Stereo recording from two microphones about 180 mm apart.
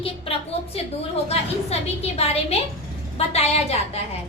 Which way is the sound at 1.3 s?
35° left (ahead or behind).